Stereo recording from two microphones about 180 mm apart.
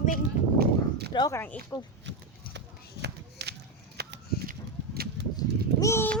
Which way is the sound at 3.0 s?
70° right (ahead or behind).